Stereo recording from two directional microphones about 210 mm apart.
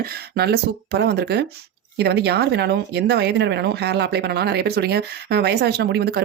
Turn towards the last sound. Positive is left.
turn(degrees=-50)  # may be behind; listen again after turning